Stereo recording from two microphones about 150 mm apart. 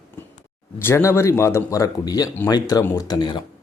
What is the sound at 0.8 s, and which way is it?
Speech, 15° left (ahead or behind).